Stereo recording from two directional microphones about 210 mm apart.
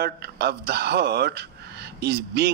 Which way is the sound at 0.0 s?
50° right (ahead or behind).